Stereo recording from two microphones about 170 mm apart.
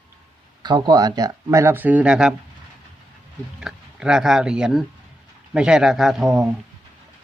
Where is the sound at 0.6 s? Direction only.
25° right (ahead or behind); by 2.3 s 5° right (ahead or behind).